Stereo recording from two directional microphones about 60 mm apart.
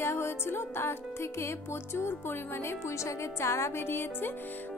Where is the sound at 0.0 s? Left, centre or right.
Left.